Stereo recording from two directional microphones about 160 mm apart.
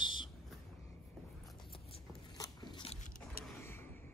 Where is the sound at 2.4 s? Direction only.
25° left (ahead or behind).